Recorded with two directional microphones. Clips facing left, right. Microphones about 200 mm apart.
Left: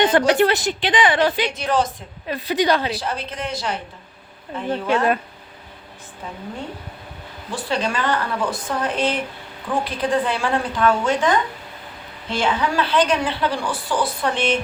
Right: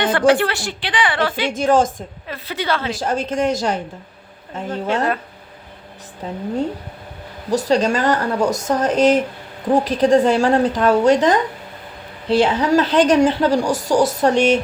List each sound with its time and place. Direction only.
0.3 s a woman's voice: 20° left (ahead or behind)
1.5 s speech: 45° right (ahead or behind)
2.2 s a woman's voice: 15° left (ahead or behind)
3.0 s speech: 45° right (ahead or behind)
7.5 s a woman's voice: 40° right (ahead or behind)